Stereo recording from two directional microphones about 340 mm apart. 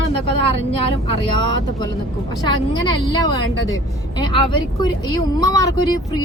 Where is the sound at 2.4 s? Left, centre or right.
Centre.